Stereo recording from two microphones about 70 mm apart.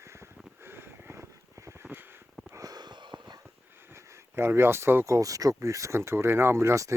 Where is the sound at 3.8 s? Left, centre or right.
Right.